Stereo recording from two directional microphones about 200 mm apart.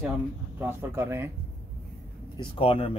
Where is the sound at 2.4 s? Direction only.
30° left (ahead or behind).